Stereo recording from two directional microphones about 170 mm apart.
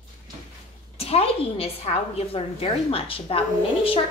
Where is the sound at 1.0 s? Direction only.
35° left (ahead or behind).